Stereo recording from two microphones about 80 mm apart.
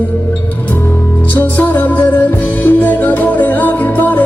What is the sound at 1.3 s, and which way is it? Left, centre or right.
Music, left.